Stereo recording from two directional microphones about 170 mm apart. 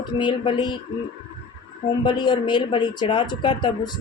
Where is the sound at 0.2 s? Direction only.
30° left (ahead or behind).